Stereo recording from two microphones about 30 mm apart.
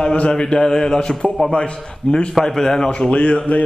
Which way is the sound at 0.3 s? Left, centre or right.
Left.